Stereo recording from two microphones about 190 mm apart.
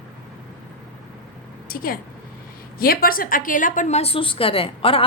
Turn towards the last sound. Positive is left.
turn(degrees=30)  # may be behind; listen again after turning